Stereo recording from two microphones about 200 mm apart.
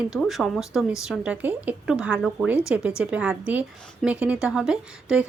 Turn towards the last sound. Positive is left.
turn(degrees=-5)  # may be behind; listen again after turning